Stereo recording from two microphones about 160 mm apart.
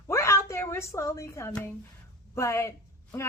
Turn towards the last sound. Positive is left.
turn(degrees=15)  # may be behind; listen again after turning